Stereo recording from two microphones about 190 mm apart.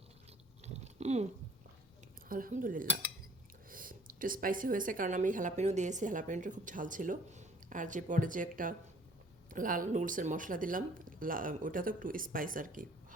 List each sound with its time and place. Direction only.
0.6 s chewing: 35° right (ahead or behind)
2.3 s a woman's voice: 45° right (ahead or behind)